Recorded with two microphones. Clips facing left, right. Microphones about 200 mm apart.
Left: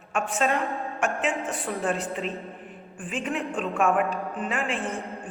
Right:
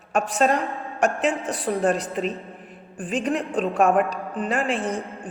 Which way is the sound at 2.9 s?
40° right (ahead or behind).